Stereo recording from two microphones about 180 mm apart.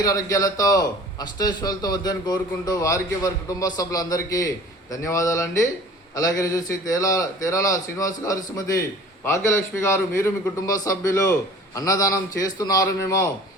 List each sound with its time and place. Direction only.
0.0 s a man's voice: 20° left (ahead or behind)